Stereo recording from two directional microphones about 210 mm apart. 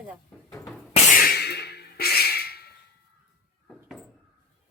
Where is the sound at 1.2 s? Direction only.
50° left (ahead or behind).